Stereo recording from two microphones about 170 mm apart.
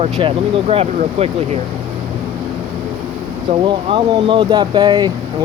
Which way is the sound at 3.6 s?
30° right (ahead or behind).